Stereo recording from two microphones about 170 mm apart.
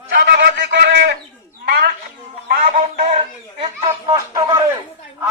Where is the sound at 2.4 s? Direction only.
50° right (ahead or behind).